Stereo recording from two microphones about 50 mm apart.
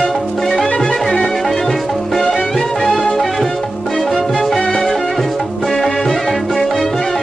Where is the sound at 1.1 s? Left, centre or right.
Centre.